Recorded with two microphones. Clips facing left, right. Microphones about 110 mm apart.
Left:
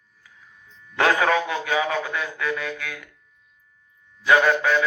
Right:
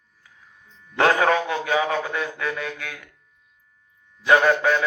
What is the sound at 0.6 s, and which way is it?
A man's voice, 30° right (ahead or behind).